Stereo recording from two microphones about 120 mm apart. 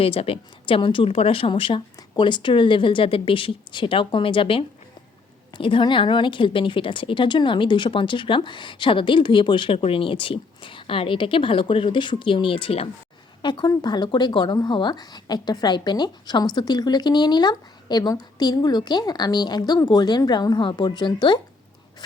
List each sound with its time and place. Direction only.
0.0 s a woman's voice: 55° left (ahead or behind)
13.4 s speech: 40° left (ahead or behind)